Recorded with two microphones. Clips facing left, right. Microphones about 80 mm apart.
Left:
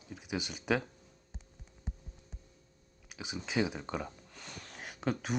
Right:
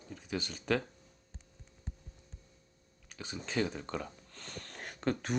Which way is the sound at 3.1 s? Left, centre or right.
Centre.